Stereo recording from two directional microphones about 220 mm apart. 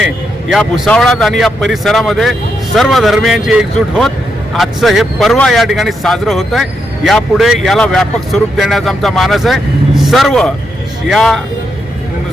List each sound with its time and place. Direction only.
0.5 s speech: 5° left (ahead or behind)